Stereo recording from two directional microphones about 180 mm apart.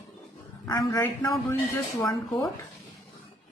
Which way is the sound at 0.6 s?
20° left (ahead or behind).